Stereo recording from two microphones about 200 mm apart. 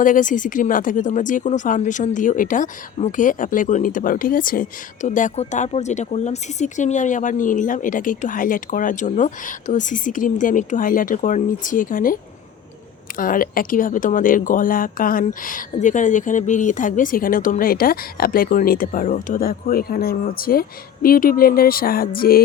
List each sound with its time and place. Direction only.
0.0 s speech: 40° left (ahead or behind)